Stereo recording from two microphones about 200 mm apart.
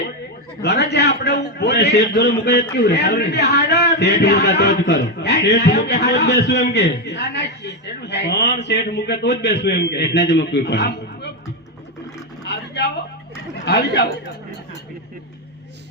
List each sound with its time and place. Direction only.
0.6 s a man's voice: 55° left (ahead or behind)
12.5 s a sound: 55° left (ahead or behind)
13.7 s speech: 55° left (ahead or behind)